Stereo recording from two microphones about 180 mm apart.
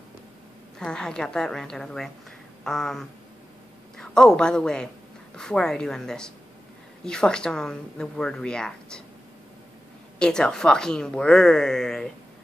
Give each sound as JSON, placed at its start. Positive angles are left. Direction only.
{"t": 0.7, "sound": "speech", "side_deg": 5}
{"t": 10.1, "sound": "speech", "side_deg": 5}